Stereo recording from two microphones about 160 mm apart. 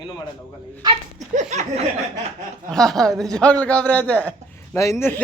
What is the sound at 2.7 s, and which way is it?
A man's voice, centre (ahead or behind).